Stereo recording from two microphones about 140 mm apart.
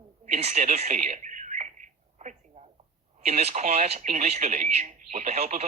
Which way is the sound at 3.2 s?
50° right (ahead or behind).